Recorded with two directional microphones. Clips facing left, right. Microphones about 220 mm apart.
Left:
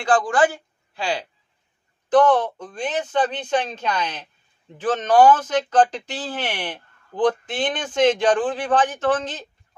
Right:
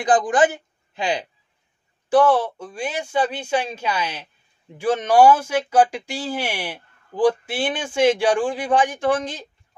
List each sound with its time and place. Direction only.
0.0 s speech: 20° right (ahead or behind)
2.0 s speech: 10° right (ahead or behind)